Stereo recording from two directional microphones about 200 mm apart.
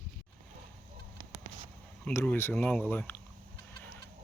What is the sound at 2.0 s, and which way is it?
Speech, 10° left (ahead or behind).